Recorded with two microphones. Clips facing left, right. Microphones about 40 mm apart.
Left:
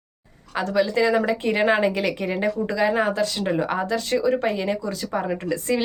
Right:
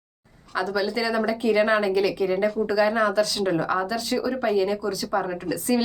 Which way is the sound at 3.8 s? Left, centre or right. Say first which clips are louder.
Left 3 dB; left.